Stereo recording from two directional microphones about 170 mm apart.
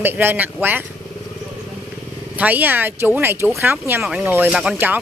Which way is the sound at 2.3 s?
10° right (ahead or behind).